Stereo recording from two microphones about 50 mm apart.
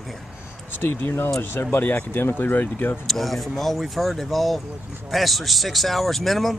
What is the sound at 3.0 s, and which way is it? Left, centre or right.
Speech, centre.